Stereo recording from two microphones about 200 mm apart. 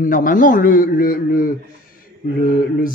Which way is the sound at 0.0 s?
40° left (ahead or behind).